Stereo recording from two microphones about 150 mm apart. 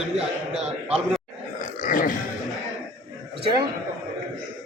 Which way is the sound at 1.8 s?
70° left (ahead or behind).